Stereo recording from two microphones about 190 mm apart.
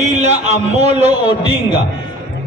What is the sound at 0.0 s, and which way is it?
Speech, 35° right (ahead or behind).